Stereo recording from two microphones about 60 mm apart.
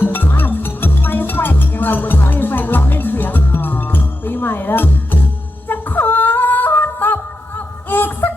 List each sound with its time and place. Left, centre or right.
0.0 s music: left
5.6 s yodeling: left
7.9 s a sound: left